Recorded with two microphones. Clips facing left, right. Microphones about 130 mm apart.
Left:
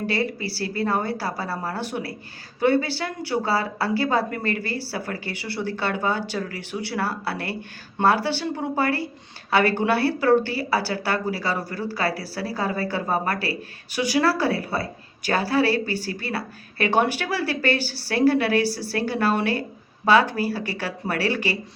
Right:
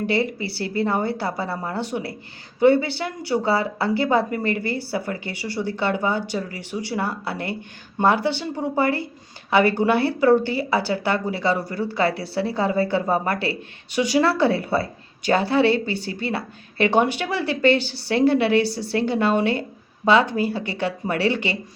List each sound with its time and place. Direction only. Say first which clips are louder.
0.0 s a woman's voice: right 3 dB; 20° right (ahead or behind)